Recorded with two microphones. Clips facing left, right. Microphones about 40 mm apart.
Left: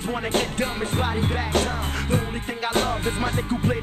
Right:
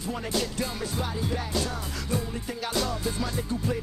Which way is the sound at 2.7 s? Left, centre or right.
Left.